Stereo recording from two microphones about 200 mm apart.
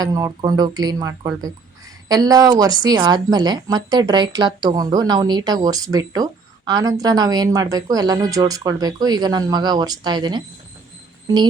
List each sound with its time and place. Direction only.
0.0 s speech: 20° right (ahead or behind)